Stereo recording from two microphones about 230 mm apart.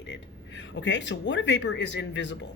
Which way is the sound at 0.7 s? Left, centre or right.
Left.